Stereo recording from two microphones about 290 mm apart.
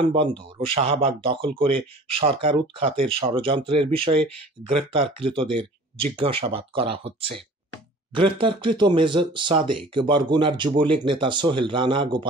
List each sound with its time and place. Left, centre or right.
0.7 s speech: centre